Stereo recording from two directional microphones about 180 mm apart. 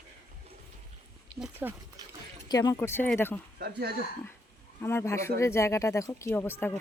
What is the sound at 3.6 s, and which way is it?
Speech, 60° right (ahead or behind).